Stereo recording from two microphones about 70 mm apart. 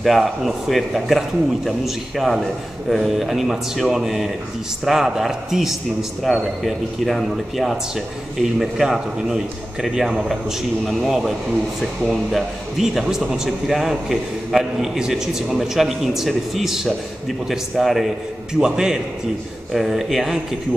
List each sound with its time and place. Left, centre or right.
0.0 s speech: centre